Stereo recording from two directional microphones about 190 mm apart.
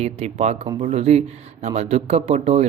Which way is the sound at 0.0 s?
35° right (ahead or behind).